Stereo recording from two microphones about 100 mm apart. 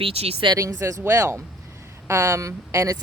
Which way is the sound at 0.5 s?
35° right (ahead or behind).